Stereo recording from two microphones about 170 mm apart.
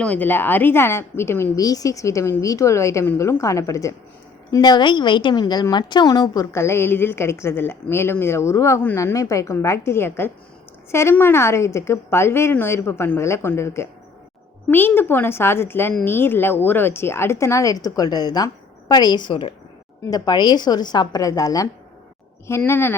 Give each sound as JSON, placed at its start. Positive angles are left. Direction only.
{"t": 0.0, "sound": "a woman's voice", "side_deg": 10}